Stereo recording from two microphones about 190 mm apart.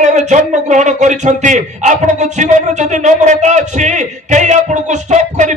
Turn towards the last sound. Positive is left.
turn(degrees=-40)  # may be behind; listen again after turning